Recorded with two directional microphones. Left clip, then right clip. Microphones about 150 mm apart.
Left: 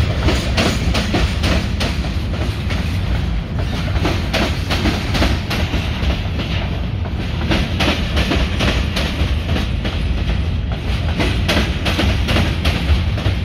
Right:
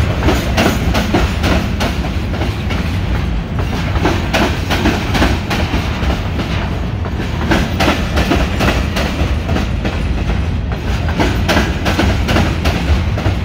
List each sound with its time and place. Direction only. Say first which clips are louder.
0.3 s train: right 4 dB; 15° left (ahead or behind)
4.0 s train: right 5 dB; 20° left (ahead or behind)
7.4 s train: right 4 dB; 20° left (ahead or behind)
11.1 s a sound: right 4 dB; 15° left (ahead or behind)